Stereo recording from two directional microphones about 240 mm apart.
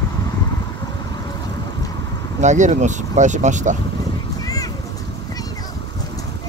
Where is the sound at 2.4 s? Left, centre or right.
Right.